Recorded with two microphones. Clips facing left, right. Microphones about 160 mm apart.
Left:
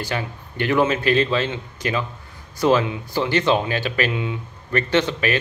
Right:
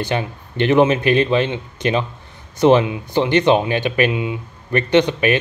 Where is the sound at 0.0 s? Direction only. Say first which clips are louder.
Right 5 dB; 20° right (ahead or behind).